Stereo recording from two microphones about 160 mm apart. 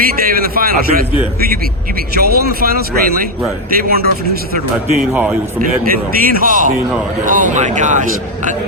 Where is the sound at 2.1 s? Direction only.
75° right (ahead or behind).